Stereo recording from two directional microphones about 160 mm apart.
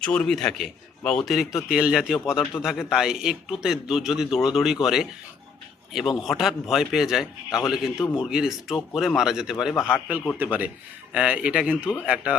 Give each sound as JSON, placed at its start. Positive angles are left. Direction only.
{"t": 0.0, "sound": "a man's voice", "side_deg": 5}
{"t": 7.9, "sound": "speech", "side_deg": 20}
{"t": 8.2, "sound": "a man's voice", "side_deg": -5}